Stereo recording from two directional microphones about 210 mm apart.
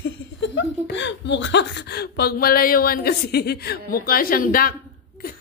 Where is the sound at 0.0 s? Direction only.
60° left (ahead or behind).